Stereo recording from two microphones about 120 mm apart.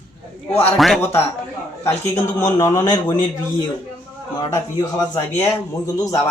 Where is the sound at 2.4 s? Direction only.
35° left (ahead or behind).